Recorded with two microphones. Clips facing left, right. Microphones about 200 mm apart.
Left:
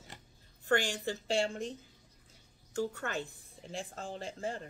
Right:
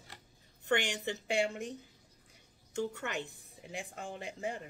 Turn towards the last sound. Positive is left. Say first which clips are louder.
# left 1 dB
turn(degrees=-15)  # may be behind; listen again after turning